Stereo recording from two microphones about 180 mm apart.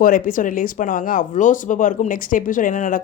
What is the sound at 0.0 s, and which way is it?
Speech, 50° left (ahead or behind).